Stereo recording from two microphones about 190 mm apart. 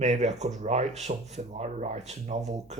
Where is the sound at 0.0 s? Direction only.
35° right (ahead or behind).